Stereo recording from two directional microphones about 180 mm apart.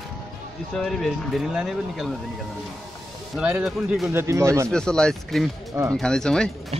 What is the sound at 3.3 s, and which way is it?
Speech, 5° right (ahead or behind).